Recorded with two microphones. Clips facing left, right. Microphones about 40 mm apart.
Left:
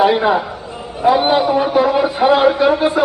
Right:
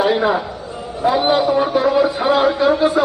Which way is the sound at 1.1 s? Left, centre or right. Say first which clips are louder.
Left 1 dB; left.